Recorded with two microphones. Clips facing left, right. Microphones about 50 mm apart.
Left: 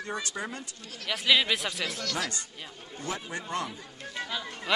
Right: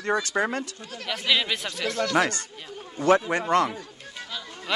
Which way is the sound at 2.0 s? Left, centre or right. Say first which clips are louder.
Right 13 dB; right.